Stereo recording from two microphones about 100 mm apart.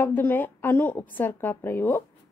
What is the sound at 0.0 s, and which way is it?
Speech, 20° left (ahead or behind).